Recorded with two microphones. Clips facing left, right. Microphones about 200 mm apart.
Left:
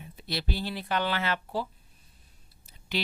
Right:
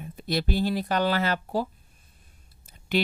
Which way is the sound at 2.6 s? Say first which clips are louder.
Right 7 dB; 50° right (ahead or behind).